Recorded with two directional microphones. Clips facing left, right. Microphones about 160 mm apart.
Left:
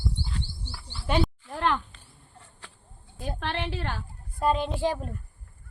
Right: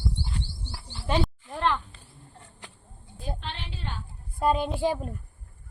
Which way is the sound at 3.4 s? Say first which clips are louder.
Left 7 dB; 70° left (ahead or behind).